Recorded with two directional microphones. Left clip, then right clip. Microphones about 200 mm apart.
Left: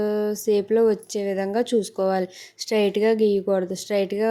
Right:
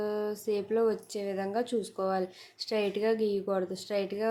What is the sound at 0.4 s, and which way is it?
Speech, 30° left (ahead or behind).